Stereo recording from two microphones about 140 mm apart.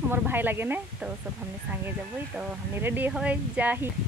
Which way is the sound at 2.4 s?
15° right (ahead or behind).